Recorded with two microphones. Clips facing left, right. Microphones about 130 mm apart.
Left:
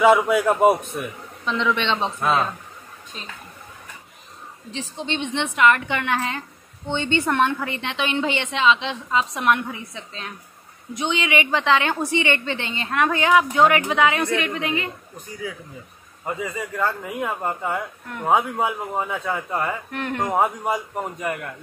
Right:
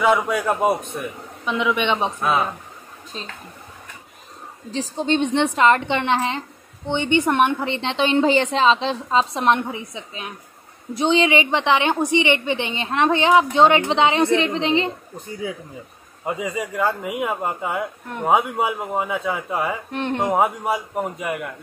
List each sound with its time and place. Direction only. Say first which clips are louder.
0.0 s a man's voice: left 3 dB; 5° left (ahead or behind)
1.4 s a man's voice: right 1 dB; 10° right (ahead or behind)
3.1 s a woman's voice: right 5 dB; 30° right (ahead or behind)
4.6 s a woman's voice: right 7 dB; 35° right (ahead or behind); by 10.3 s 20° right (ahead or behind)
11.0 s a woman's voice: right 5 dB; 30° right (ahead or behind)
16.3 s a man's voice: right 3 dB; 15° right (ahead or behind)
19.9 s a woman's voice: right 3 dB; 25° right (ahead or behind)
20.3 s a man's voice: right 1 dB; 5° right (ahead or behind)